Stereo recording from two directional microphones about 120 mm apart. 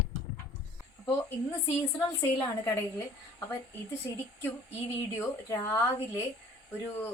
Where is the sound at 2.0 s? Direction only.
25° left (ahead or behind).